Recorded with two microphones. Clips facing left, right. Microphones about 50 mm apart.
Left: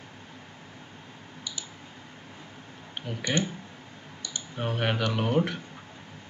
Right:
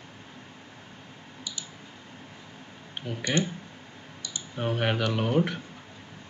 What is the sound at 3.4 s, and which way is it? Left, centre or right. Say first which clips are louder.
Speech: right 1 dB; left.